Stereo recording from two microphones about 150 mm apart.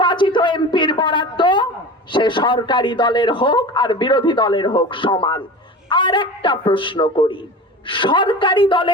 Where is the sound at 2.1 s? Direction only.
30° left (ahead or behind).